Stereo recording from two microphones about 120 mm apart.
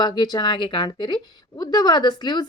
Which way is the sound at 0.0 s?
35° left (ahead or behind).